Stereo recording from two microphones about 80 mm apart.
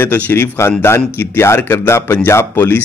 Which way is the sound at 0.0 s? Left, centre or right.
Left.